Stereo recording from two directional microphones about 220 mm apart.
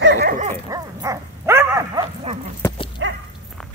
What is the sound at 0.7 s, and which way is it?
Dog, 15° right (ahead or behind).